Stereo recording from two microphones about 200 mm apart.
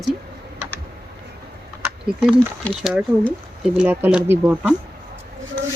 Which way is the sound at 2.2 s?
Centre (ahead or behind).